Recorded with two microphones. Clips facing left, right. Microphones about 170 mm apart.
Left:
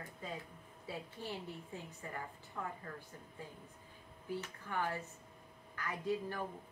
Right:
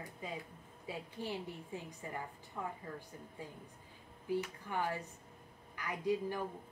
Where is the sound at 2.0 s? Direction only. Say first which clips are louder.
Right 2 dB; 15° right (ahead or behind).